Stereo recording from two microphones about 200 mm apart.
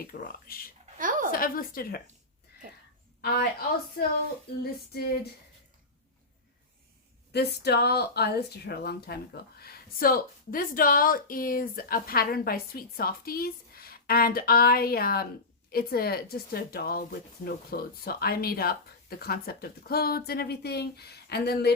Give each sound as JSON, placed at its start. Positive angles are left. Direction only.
{"t": 0.1, "sound": "speech", "side_deg": 45}
{"t": 0.9, "sound": "a sound", "side_deg": -40}
{"t": 1.3, "sound": "speech", "side_deg": 45}
{"t": 3.2, "sound": "a woman's voice", "side_deg": 50}
{"t": 7.3, "sound": "speech", "side_deg": 55}